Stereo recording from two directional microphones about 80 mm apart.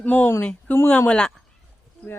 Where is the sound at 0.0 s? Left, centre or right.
Left.